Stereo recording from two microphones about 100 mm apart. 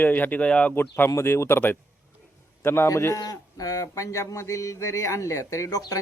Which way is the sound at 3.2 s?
40° left (ahead or behind).